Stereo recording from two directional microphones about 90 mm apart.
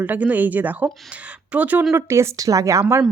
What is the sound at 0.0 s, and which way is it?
Speech, 15° right (ahead or behind).